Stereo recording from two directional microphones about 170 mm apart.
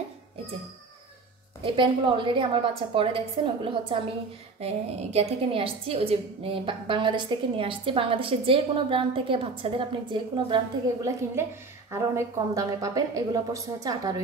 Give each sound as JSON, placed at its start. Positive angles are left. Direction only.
{"t": 1.6, "sound": "a woman's voice", "side_deg": -30}